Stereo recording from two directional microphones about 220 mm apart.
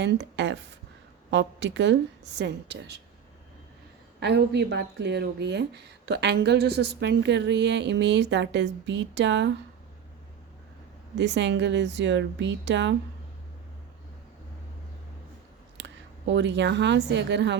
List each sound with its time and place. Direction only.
0.0 s a woman's voice: 55° right (ahead or behind)
4.2 s a woman's voice: 50° right (ahead or behind)
11.2 s a woman's voice: 55° right (ahead or behind)
15.8 s a woman's voice: 55° right (ahead or behind)